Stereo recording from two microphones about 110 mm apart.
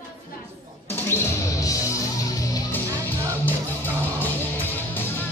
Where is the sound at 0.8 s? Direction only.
20° left (ahead or behind).